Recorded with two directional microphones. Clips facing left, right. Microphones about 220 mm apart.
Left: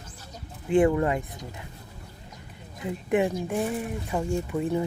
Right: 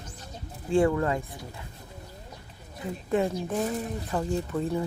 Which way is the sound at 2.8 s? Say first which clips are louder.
Left 2 dB; 15° left (ahead or behind).